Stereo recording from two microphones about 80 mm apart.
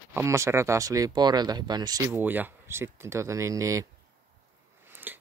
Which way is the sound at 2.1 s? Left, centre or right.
Right.